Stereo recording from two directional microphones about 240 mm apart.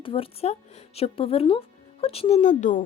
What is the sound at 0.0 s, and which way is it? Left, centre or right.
Speech, left.